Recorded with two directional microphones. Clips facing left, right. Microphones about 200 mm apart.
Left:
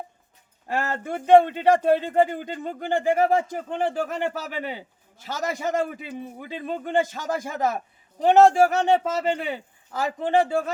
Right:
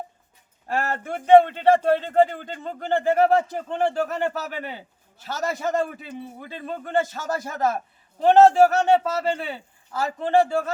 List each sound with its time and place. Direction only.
0.7 s speech: 15° left (ahead or behind)